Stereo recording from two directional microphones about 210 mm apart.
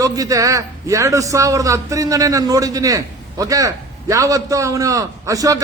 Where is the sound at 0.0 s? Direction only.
15° right (ahead or behind).